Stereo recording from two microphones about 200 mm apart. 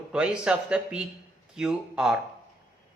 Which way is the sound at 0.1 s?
5° right (ahead or behind).